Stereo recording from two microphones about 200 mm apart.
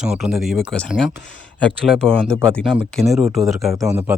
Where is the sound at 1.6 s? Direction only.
5° left (ahead or behind).